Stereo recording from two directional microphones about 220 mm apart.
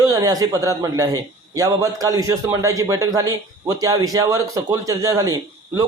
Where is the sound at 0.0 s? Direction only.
15° right (ahead or behind).